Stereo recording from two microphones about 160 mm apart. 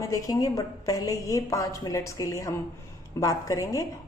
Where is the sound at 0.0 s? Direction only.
20° left (ahead or behind).